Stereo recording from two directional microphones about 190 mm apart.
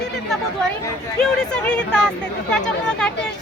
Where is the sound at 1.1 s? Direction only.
5° left (ahead or behind).